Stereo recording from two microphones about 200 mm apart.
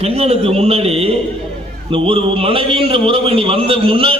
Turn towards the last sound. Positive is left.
turn(degrees=-30)  # may be behind; listen again after turning